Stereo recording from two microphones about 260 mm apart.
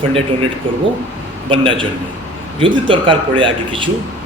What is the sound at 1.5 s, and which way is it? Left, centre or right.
A man's voice, centre.